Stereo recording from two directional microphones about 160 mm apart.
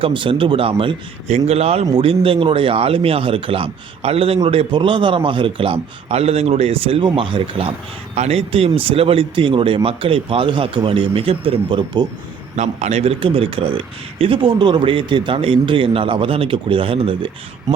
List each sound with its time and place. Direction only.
0.0 s speech: 30° right (ahead or behind)
12.5 s speech: 45° right (ahead or behind)